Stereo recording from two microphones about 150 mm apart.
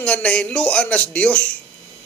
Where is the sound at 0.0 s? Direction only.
10° left (ahead or behind).